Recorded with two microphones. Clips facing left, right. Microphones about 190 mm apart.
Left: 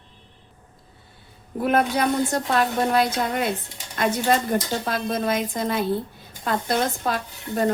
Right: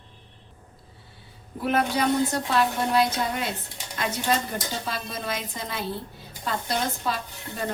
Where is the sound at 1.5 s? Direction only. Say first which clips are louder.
Left 3 dB; 50° left (ahead or behind).